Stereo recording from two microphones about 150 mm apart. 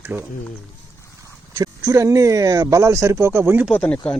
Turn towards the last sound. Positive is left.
turn(degrees=5)  # may be behind; listen again after turning